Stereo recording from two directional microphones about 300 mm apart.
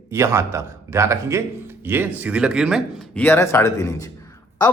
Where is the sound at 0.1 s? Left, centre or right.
Centre.